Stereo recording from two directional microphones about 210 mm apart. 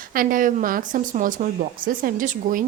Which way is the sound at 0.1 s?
40° right (ahead or behind).